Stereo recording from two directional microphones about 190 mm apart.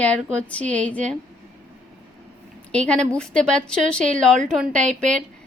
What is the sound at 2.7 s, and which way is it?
A woman's voice, 5° left (ahead or behind).